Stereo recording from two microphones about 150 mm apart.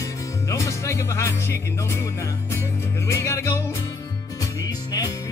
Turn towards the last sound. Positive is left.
turn(degrees=25)  # may be behind; listen again after turning